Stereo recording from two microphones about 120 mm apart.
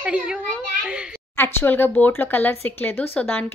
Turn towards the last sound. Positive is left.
turn(degrees=15)  # may be behind; listen again after turning